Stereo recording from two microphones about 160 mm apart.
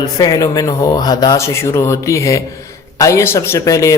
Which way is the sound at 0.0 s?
20° left (ahead or behind).